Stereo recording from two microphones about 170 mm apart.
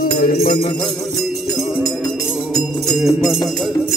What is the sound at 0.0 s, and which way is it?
Music, 60° left (ahead or behind).